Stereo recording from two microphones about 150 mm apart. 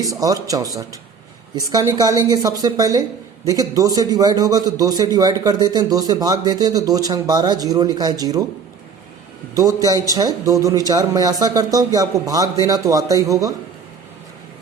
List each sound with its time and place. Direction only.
0.0 s a woman's voice: 25° right (ahead or behind)
9.6 s a woman's voice: 25° right (ahead or behind)